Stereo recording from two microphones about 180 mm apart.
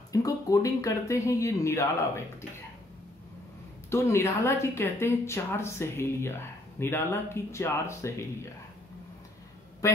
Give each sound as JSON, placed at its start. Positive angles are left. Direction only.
{"t": 0.1, "sound": "speech", "side_deg": 20}
{"t": 3.9, "sound": "speech", "side_deg": 15}